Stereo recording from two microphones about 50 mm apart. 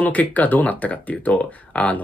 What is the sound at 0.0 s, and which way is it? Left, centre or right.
Speech, left.